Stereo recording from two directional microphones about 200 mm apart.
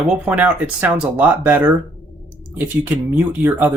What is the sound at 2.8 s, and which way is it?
Speech, 10° right (ahead or behind).